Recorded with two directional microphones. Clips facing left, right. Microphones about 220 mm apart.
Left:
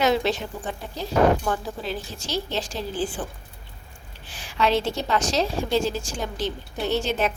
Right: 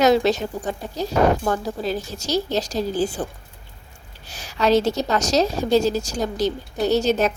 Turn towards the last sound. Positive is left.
turn(degrees=-40)  # may be behind; listen again after turning